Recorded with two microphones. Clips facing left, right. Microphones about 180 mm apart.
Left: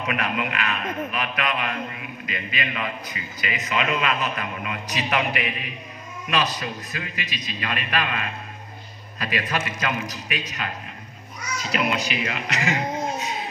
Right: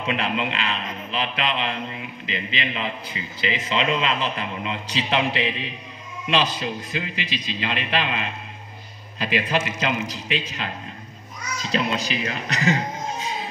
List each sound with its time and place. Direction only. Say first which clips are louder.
0.0 s a man's voice: right 1 dB; 25° right (ahead or behind)
11.7 s a man's voice: right 1 dB; 30° right (ahead or behind)